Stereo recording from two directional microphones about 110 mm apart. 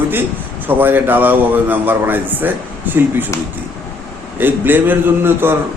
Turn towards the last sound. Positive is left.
turn(degrees=-20)  # may be behind; listen again after turning